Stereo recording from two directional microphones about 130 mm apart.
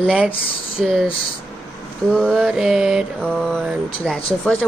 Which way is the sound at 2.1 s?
Centre (ahead or behind).